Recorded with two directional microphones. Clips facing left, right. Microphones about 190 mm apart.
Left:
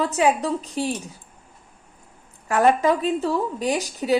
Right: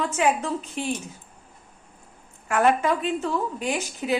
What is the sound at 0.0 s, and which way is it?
Speech, 35° left (ahead or behind).